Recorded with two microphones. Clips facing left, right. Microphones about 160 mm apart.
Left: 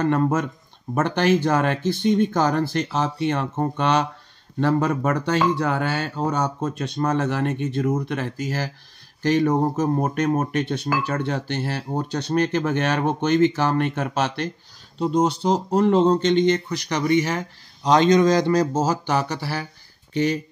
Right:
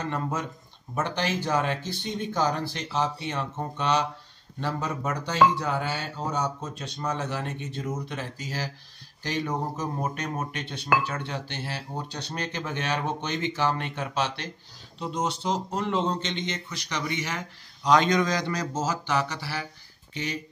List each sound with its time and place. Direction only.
0.0 s speech: 60° left (ahead or behind); by 18.7 s 30° left (ahead or behind)
18.8 s speech: 40° left (ahead or behind)